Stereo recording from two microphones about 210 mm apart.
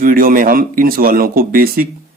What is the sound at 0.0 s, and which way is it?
Speech, 45° right (ahead or behind).